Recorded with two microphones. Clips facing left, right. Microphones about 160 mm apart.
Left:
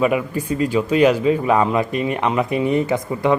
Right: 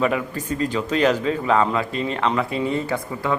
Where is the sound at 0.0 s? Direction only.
15° left (ahead or behind).